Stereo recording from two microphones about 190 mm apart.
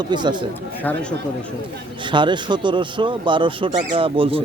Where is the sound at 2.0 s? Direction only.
25° right (ahead or behind).